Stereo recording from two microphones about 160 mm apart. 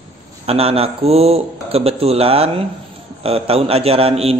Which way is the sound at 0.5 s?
40° right (ahead or behind).